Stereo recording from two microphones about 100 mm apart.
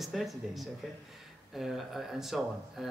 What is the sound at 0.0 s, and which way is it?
Speech, centre (ahead or behind).